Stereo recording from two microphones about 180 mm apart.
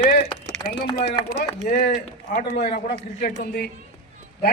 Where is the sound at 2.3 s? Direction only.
40° left (ahead or behind).